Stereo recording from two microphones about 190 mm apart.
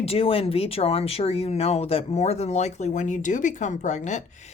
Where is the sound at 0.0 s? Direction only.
30° left (ahead or behind).